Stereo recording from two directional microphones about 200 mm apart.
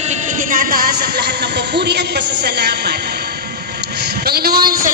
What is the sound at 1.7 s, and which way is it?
Speech, 55° right (ahead or behind).